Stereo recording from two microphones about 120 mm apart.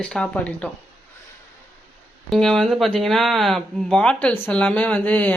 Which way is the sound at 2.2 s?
5° left (ahead or behind).